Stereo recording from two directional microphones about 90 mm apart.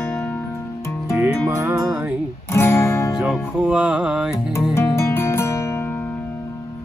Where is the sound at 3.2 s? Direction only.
5° right (ahead or behind).